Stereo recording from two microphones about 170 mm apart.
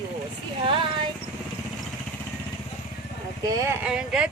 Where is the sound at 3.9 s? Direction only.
5° right (ahead or behind).